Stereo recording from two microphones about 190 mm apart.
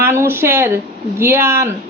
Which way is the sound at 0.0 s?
15° right (ahead or behind).